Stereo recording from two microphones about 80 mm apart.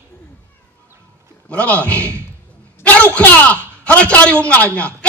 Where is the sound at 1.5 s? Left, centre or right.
Centre.